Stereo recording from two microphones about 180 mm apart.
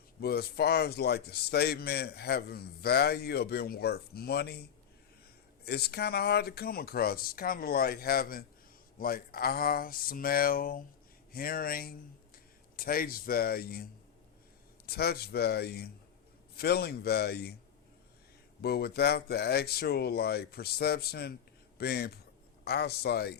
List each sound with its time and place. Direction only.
0.2 s a man's voice: 60° left (ahead or behind)
5.6 s a man's voice: 60° left (ahead or behind)
14.8 s a man's voice: 60° left (ahead or behind)
18.6 s a man's voice: 60° left (ahead or behind)